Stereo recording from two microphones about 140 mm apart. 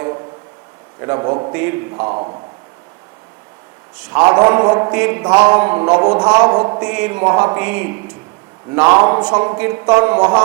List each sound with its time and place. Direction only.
0.0 s a sound: 20° right (ahead or behind)
0.9 s a man's voice: 20° right (ahead or behind)
2.1 s a man's voice: 35° right (ahead or behind)
3.9 s a man's voice: 10° right (ahead or behind)
4.2 s a man's voice: 25° right (ahead or behind)
10.2 s a man's voice: 30° right (ahead or behind)